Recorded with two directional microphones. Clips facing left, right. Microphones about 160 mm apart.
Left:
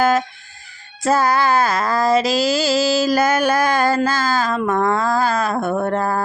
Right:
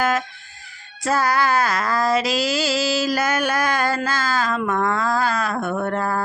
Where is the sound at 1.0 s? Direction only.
25° left (ahead or behind).